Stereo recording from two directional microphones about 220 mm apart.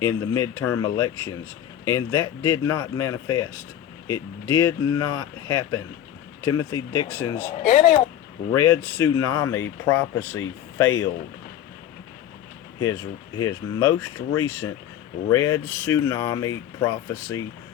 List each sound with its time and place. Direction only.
0.0 s speech: 15° left (ahead or behind)
7.6 s speech: 35° left (ahead or behind)
8.5 s speech: 10° left (ahead or behind)
13.4 s speech: 15° left (ahead or behind)